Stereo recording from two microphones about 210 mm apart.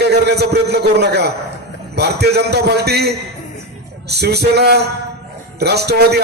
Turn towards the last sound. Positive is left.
turn(degrees=-50)  # may be behind; listen again after turning